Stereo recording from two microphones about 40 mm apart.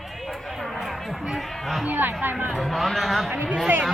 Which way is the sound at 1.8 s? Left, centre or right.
Right.